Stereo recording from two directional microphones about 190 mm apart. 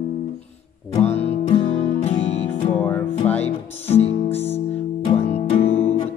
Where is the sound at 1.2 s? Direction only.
30° left (ahead or behind).